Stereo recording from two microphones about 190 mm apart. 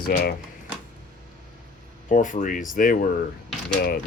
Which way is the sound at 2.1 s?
40° left (ahead or behind).